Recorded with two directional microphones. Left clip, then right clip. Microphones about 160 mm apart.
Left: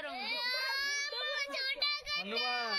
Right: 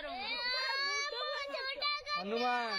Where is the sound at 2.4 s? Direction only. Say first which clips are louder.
Right 2 dB; 70° right (ahead or behind).